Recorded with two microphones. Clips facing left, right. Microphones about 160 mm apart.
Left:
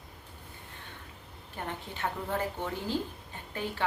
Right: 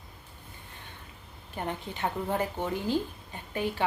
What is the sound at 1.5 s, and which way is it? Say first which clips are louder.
A woman's voice: right 4 dB; 15° right (ahead or behind).